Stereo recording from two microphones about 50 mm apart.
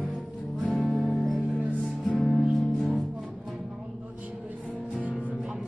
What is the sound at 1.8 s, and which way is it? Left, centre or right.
Music, left.